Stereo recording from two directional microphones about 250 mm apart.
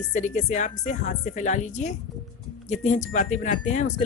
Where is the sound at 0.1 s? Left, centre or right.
Left.